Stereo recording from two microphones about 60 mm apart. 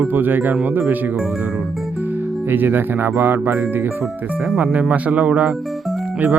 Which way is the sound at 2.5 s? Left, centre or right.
Right.